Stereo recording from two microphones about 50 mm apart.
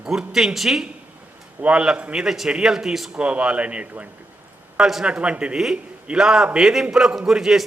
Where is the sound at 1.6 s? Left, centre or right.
Centre.